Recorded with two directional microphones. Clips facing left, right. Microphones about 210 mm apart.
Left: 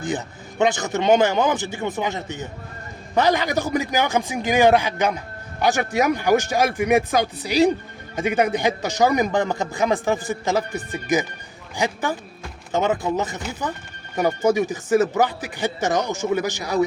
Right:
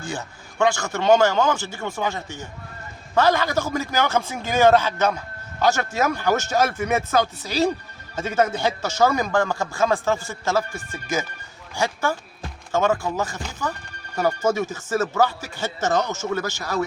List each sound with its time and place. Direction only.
0.0 s a man's voice: 20° left (ahead or behind)